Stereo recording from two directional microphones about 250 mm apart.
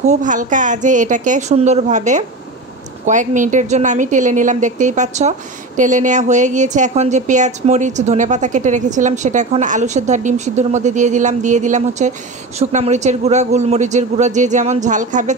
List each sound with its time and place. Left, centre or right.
0.0 s a woman's voice: right